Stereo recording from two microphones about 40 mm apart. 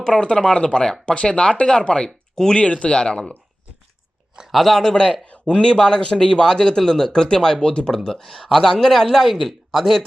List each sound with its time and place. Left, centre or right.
0.0 s speech: left
2.6 s speech: left
4.5 s speech: centre
5.2 s speech: left; by 10.1 s centre